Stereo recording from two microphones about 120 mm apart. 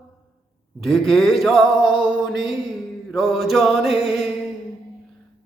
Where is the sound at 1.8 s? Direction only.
40° left (ahead or behind).